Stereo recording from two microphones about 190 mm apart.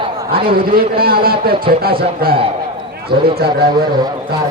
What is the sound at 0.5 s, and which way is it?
A man's voice, 50° right (ahead or behind).